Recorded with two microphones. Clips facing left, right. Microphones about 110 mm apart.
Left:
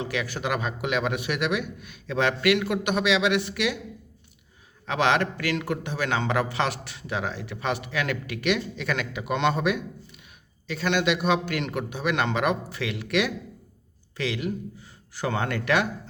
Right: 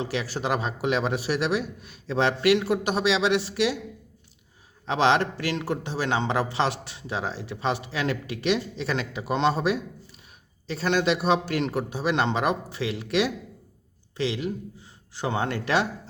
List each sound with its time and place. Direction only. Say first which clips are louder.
0.0 s a man's voice: right 1 dB; 35° right (ahead or behind)
4.9 s a man's voice: right 2 dB; 30° right (ahead or behind)